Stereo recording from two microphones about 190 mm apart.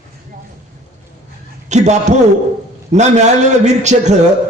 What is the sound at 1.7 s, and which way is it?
A man's voice, 35° right (ahead or behind).